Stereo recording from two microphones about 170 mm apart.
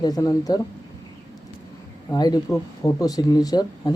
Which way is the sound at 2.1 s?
25° left (ahead or behind).